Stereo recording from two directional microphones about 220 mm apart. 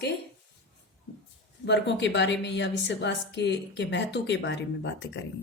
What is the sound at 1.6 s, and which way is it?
A woman's voice, 50° left (ahead or behind).